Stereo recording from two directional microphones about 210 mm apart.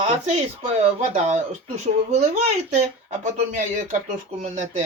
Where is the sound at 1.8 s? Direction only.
30° right (ahead or behind).